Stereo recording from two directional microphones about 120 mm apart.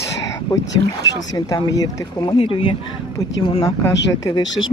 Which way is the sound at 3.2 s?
30° left (ahead or behind).